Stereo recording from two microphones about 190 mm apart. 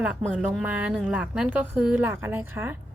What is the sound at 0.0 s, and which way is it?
A woman's voice, centre (ahead or behind).